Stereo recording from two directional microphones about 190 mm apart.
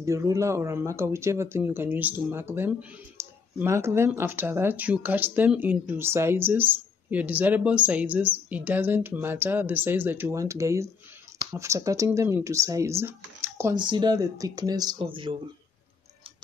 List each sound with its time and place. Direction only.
0.0 s speech: 15° right (ahead or behind)
13.7 s speech: 25° right (ahead or behind)